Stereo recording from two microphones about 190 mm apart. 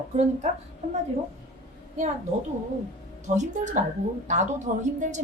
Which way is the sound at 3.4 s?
40° right (ahead or behind).